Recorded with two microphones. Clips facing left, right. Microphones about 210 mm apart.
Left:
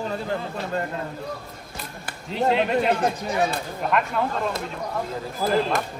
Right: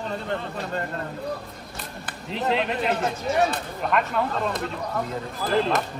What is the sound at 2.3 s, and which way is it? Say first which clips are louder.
Speech: left 4 dB; centre (ahead or behind).